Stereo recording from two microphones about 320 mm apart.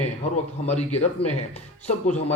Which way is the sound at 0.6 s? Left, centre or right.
Centre.